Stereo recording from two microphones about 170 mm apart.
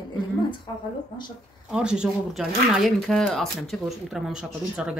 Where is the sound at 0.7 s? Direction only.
20° left (ahead or behind).